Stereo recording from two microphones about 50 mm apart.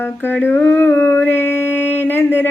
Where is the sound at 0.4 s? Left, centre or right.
Left.